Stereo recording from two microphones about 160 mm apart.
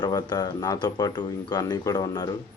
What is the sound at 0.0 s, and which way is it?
Speech, 25° left (ahead or behind).